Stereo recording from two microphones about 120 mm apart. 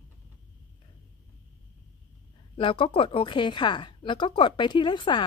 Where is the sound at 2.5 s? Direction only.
45° left (ahead or behind).